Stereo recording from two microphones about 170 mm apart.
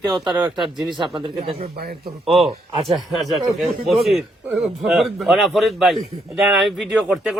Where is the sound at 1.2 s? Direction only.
30° right (ahead or behind).